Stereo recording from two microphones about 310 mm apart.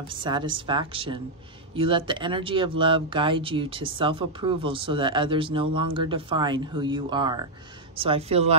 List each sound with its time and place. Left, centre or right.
0.1 s speech: centre